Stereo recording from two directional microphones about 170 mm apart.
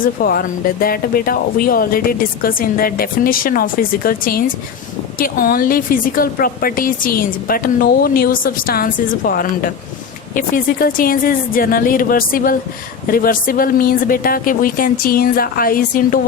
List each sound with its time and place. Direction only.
0.0 s a woman's voice: 60° left (ahead or behind)